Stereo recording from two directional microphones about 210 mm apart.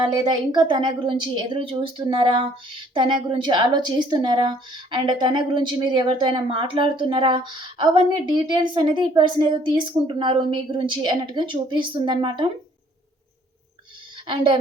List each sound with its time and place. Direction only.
0.0 s a woman's voice: 20° right (ahead or behind)
14.3 s a woman's voice: 25° right (ahead or behind)